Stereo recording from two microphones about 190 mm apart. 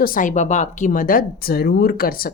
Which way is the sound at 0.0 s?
45° left (ahead or behind).